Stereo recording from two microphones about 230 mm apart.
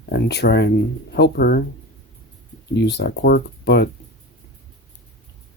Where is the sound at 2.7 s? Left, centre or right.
Left.